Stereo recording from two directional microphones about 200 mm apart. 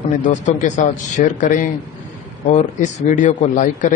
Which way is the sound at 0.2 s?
40° left (ahead or behind).